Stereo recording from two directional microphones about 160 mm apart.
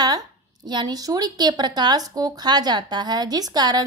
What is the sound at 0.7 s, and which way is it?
Speech, 25° right (ahead or behind).